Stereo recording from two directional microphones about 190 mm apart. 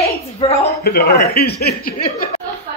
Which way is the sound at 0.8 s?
60° left (ahead or behind).